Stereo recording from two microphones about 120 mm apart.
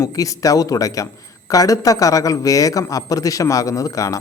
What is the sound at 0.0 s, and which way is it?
Speech, 30° left (ahead or behind).